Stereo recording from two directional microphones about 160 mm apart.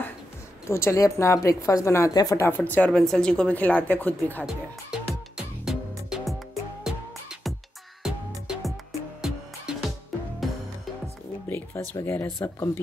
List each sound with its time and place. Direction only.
0.7 s speech: 15° left (ahead or behind)
4.9 s music: 5° right (ahead or behind)
11.4 s a sound: 15° left (ahead or behind)
11.9 s speech: 15° left (ahead or behind)